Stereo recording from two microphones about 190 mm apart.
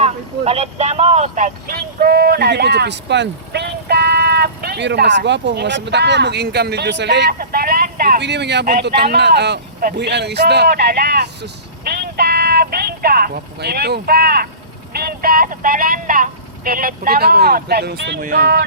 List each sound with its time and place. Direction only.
0.0 s speech: 35° right (ahead or behind); by 18.6 s 50° right (ahead or behind)